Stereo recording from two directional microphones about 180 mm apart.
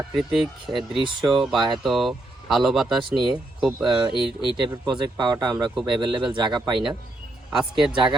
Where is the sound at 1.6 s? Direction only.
25° right (ahead or behind).